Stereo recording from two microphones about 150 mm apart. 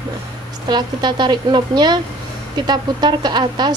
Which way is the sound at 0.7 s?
30° right (ahead or behind).